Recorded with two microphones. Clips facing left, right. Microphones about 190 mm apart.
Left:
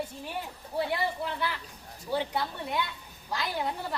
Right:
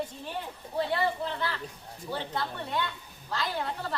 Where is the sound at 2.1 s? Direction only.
15° left (ahead or behind).